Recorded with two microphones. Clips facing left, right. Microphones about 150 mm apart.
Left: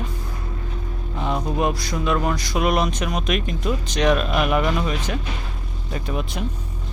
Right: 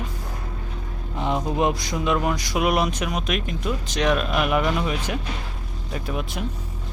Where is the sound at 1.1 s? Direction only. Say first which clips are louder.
Right 1 dB; 20° right (ahead or behind); by 6.4 s 5° right (ahead or behind).